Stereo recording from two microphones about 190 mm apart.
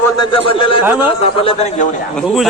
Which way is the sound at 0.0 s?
25° left (ahead or behind).